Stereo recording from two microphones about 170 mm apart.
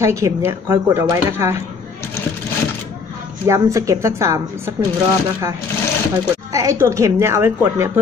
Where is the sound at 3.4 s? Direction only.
20° right (ahead or behind).